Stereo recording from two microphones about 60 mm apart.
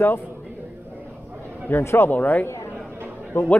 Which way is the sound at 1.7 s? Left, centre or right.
Left.